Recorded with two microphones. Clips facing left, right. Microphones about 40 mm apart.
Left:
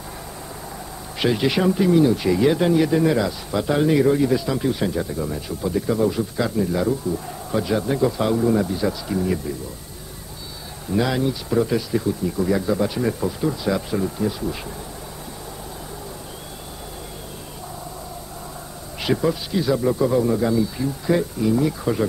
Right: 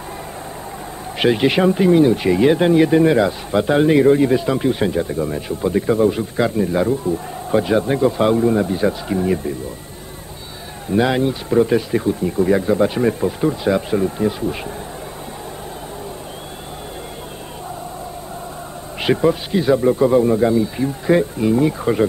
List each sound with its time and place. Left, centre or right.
1.2 s speech: right
10.9 s speech: right
18.9 s speech: right